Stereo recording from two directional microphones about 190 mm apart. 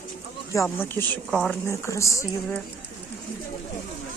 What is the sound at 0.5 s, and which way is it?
Speech, 15° left (ahead or behind).